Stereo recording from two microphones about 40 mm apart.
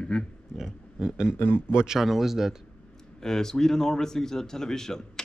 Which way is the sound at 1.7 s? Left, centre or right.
Centre.